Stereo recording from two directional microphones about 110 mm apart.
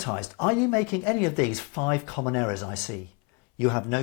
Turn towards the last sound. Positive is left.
turn(degrees=20)  # may be behind; listen again after turning